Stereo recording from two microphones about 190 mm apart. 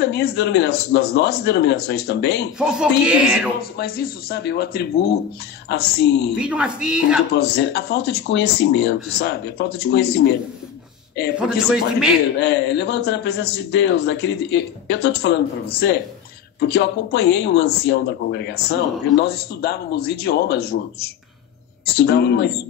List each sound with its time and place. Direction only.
0.0 s a man's voice: 60° left (ahead or behind)
2.6 s speech: 5° right (ahead or behind)
3.7 s a man's voice: 55° left (ahead or behind)
6.3 s speech: 5° right (ahead or behind)
7.3 s a man's voice: 60° left (ahead or behind)
11.3 s speech: 5° right (ahead or behind)
12.4 s a man's voice: 65° left (ahead or behind)